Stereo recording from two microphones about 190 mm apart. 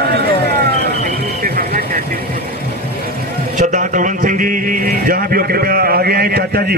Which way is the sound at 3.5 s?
40° right (ahead or behind).